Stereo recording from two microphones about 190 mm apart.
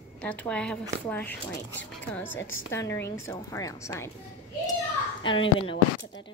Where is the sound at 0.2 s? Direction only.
5° left (ahead or behind).